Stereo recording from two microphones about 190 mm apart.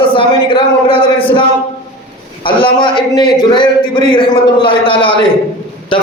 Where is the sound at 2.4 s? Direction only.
25° left (ahead or behind).